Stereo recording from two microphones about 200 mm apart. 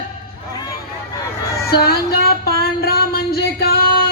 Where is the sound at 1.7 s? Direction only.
50° left (ahead or behind).